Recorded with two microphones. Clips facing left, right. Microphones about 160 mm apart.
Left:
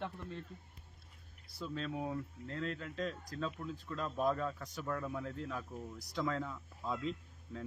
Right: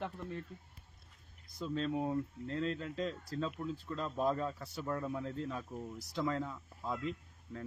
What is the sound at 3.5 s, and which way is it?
Speech, 5° right (ahead or behind).